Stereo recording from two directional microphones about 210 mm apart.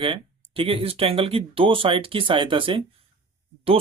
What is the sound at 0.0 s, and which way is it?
Speech, 25° right (ahead or behind).